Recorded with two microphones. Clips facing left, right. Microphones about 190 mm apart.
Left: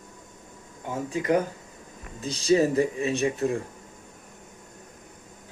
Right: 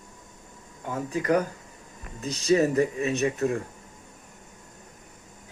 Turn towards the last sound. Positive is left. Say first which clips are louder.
# even
turn(degrees=25)  # may be behind; listen again after turning